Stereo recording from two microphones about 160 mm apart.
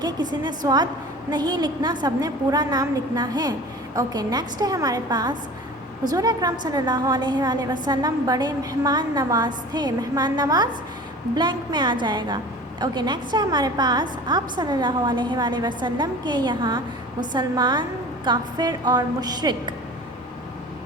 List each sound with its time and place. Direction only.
0.0 s a woman's voice: 25° right (ahead or behind)